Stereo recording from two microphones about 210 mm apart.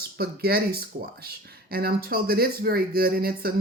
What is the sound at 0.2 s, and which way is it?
Speech, 50° right (ahead or behind).